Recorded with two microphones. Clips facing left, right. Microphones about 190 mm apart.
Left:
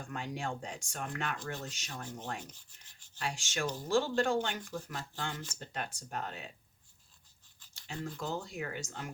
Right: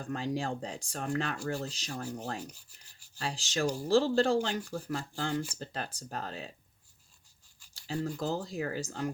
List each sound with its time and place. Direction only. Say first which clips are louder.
0.0 s speech: right 5 dB; 35° right (ahead or behind)
2.7 s rub: right 1 dB; 35° right (ahead or behind)
3.8 s speech: right 4 dB; 35° right (ahead or behind)
7.7 s speech: right 7 dB; 35° right (ahead or behind)